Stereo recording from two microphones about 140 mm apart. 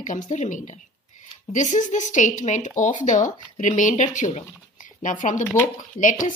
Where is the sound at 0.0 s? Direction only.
60° left (ahead or behind).